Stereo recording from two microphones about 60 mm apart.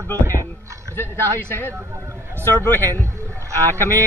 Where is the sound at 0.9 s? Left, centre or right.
Left.